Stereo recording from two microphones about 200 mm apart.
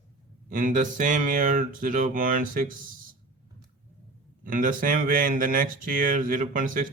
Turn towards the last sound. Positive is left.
turn(degrees=-40)  # may be behind; listen again after turning